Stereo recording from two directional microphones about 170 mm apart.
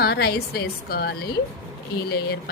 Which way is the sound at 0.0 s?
65° left (ahead or behind).